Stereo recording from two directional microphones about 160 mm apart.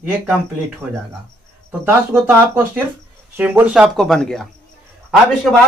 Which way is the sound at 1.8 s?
15° right (ahead or behind).